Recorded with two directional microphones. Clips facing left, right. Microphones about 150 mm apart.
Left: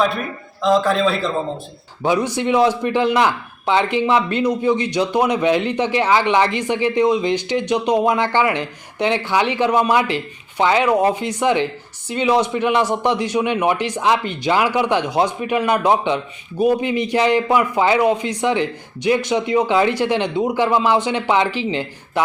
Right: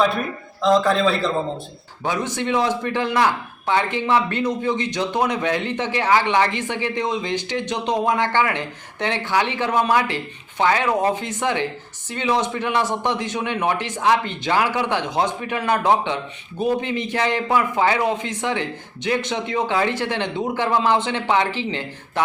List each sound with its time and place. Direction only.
0.6 s a man's voice: centre (ahead or behind)
2.0 s speech: 15° left (ahead or behind)